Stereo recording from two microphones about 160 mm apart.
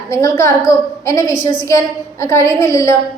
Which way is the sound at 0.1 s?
20° left (ahead or behind).